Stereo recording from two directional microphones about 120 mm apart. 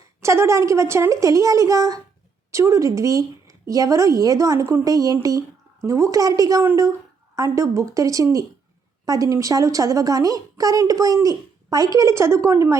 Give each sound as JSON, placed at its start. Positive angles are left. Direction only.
{"t": 0.2, "sound": "a woman's voice", "side_deg": -25}